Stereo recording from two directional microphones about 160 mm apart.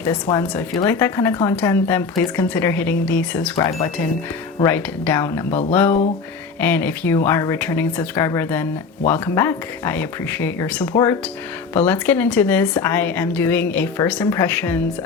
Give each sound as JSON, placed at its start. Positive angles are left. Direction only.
{"t": 0.0, "sound": "speech", "side_deg": 15}
{"t": 3.5, "sound": "speech", "side_deg": 20}
{"t": 6.6, "sound": "speech", "side_deg": 10}